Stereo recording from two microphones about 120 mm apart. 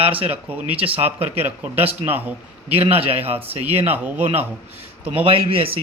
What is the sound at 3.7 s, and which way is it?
Speech, 15° right (ahead or behind).